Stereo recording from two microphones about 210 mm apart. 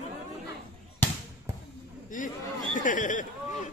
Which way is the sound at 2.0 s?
40° left (ahead or behind).